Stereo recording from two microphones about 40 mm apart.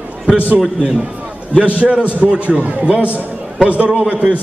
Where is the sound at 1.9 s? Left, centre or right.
Right.